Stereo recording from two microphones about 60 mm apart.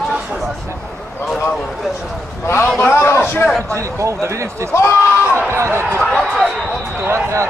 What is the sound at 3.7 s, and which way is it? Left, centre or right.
Speech, right.